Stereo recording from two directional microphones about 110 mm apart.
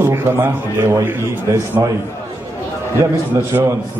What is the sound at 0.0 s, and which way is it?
A man's voice, 20° right (ahead or behind).